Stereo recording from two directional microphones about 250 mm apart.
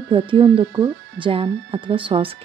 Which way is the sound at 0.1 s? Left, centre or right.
Right.